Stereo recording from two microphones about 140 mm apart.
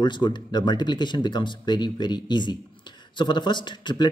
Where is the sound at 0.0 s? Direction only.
30° left (ahead or behind).